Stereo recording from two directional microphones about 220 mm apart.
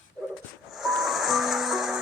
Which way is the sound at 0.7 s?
Centre (ahead or behind).